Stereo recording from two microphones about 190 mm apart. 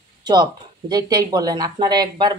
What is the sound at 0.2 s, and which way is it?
Speech, 20° right (ahead or behind).